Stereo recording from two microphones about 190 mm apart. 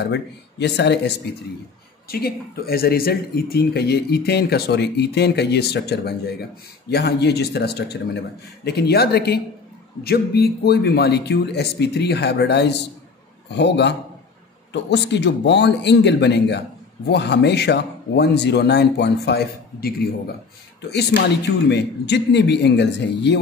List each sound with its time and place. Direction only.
0.0 s speech: 65° left (ahead or behind)
2.0 s speech: 55° left (ahead or behind)
20.9 s speech: 60° left (ahead or behind)